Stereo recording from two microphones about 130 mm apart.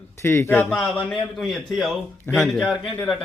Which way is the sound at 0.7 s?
5° left (ahead or behind).